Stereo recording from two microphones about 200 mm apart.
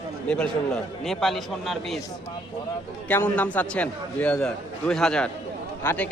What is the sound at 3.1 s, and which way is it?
A man's voice, 10° left (ahead or behind).